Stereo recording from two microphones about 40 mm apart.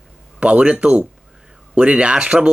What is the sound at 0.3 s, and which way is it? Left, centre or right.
Speech, right.